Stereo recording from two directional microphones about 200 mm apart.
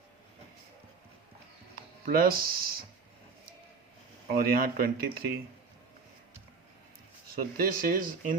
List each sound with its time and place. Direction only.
1.7 s speech: 45° right (ahead or behind)
4.3 s speech: 45° right (ahead or behind)
7.3 s speech: 45° right (ahead or behind)